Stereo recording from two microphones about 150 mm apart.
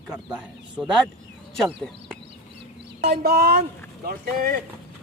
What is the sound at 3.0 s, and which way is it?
Speech, 90° right.